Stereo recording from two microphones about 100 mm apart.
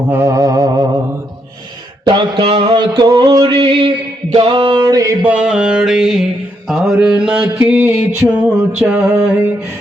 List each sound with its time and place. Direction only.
0.1 s a sound: 30° right (ahead or behind)
2.0 s music: 55° right (ahead or behind); by 5.1 s 40° right (ahead or behind)
5.2 s music: 10° right (ahead or behind)
6.7 s mantra: 5° right (ahead or behind)
6.9 s music: 10° right (ahead or behind)